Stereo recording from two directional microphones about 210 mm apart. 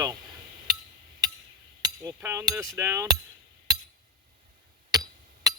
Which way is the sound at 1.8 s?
15° right (ahead or behind).